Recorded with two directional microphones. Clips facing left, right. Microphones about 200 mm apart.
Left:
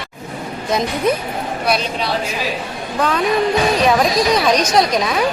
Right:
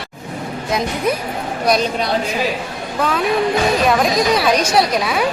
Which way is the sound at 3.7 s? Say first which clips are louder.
Left 1 dB; centre (ahead or behind).